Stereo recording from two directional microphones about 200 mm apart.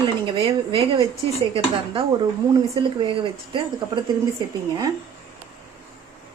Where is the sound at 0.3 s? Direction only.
25° right (ahead or behind).